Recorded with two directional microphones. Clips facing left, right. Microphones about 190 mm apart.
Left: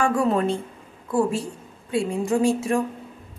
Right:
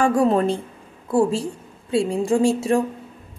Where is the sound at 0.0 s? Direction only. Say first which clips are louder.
Right 3 dB; 35° right (ahead or behind).